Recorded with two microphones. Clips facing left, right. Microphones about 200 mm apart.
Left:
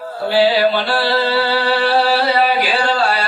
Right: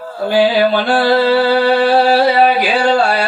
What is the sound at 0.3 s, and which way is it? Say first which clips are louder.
Music: right 2 dB; 50° right (ahead or behind).